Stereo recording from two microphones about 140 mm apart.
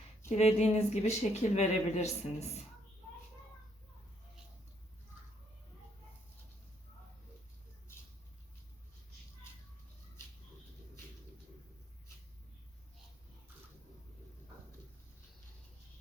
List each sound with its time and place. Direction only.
0.3 s speech: 50° left (ahead or behind)